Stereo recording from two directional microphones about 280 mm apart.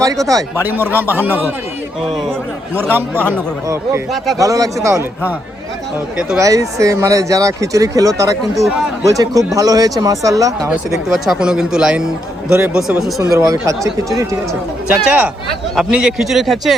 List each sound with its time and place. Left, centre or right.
0.3 s speech: centre
6.1 s speech: centre
8.5 s speech: centre
9.0 s speech: centre
10.9 s speech: centre
13.3 s speech: centre
15.0 s speech: centre